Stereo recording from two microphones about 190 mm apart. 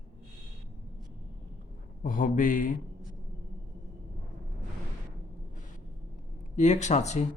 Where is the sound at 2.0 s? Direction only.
45° left (ahead or behind).